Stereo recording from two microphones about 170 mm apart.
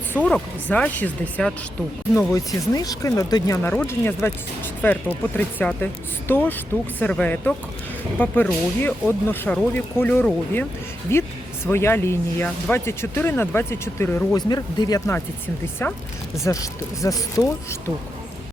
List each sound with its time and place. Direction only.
0.1 s speech: 5° left (ahead or behind)
2.1 s speech: 20° left (ahead or behind)
14.3 s speech: 25° left (ahead or behind)